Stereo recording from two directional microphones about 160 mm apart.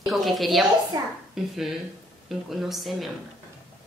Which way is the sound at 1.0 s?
25° right (ahead or behind).